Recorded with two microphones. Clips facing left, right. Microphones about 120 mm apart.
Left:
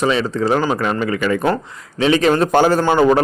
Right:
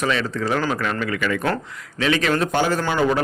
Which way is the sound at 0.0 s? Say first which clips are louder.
Left 5 dB; 25° left (ahead or behind).